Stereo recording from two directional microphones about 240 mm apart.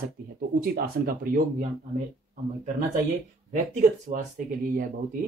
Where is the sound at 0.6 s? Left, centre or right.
Right.